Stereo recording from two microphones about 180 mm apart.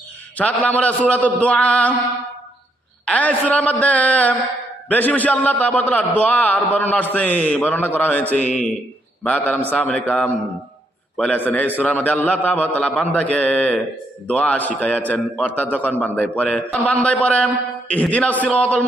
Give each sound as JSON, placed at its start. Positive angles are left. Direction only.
{"t": 0.3, "sound": "a man's voice", "side_deg": 10}
{"t": 3.1, "sound": "a man's voice", "side_deg": 10}